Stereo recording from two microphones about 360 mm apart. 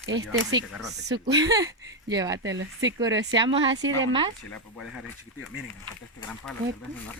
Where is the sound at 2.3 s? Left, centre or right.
Right.